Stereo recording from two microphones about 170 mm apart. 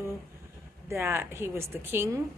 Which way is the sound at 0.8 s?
15° right (ahead or behind).